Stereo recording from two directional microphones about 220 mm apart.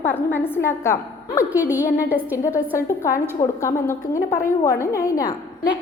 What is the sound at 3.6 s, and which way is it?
A woman's voice, 15° left (ahead or behind).